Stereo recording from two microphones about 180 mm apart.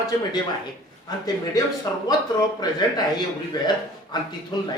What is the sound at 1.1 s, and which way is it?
Speech, 20° left (ahead or behind).